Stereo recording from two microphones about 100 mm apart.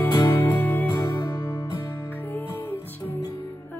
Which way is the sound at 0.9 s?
30° left (ahead or behind).